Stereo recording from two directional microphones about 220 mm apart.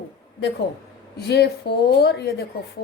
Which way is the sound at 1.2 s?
50° left (ahead or behind).